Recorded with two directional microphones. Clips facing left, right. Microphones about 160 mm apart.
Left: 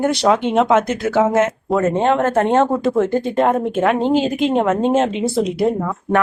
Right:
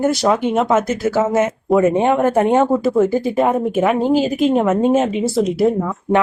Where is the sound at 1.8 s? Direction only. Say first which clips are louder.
Left 2 dB; 15° right (ahead or behind).